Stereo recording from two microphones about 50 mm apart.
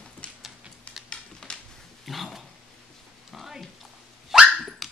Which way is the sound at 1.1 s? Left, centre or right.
Centre.